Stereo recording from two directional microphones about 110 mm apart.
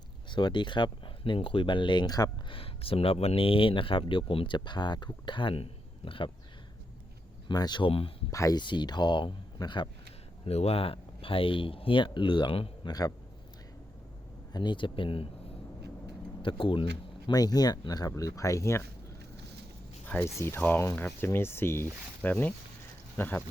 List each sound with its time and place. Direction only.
0.3 s speech: 45° left (ahead or behind)
2.5 s speech: 55° left (ahead or behind)
7.4 s speech: 40° left (ahead or behind)
8.3 s speech: 30° left (ahead or behind)
8.6 s speech: 45° left (ahead or behind)
10.4 s speech: 70° left (ahead or behind)
12.8 s speech: 35° left (ahead or behind)
14.5 s speech: 45° left (ahead or behind)
16.4 s speech: 50° left (ahead or behind)
17.2 s speech: 35° left (ahead or behind)
20.4 s speech: 20° left (ahead or behind)